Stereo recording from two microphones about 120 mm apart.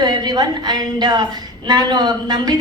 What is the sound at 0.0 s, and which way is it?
A woman's voice, 35° right (ahead or behind).